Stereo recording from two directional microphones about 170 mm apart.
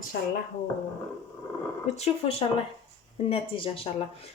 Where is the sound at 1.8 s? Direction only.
40° left (ahead or behind).